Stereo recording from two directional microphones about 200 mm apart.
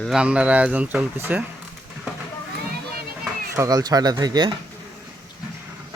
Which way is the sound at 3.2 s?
15° right (ahead or behind).